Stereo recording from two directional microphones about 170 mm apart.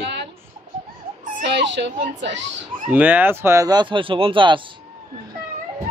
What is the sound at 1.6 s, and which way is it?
Speech, 90° right.